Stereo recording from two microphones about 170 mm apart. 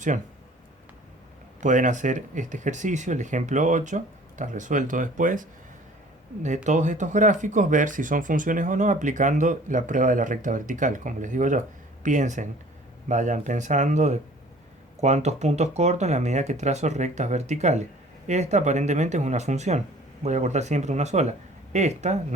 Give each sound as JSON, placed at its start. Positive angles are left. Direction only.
{"t": 1.6, "sound": "speech", "side_deg": -45}
{"t": 6.7, "sound": "speech", "side_deg": -45}